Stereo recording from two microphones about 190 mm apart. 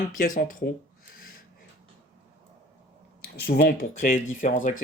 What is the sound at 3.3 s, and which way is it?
Speech, 60° left (ahead or behind).